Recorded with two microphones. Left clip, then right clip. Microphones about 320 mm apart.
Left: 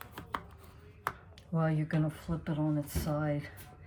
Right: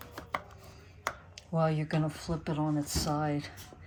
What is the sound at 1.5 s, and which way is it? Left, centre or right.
Speech, centre.